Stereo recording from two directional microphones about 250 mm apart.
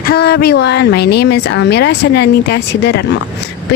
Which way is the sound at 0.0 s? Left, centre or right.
Left.